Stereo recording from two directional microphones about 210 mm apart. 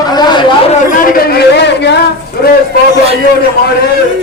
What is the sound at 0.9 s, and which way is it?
A man's voice, 45° left (ahead or behind).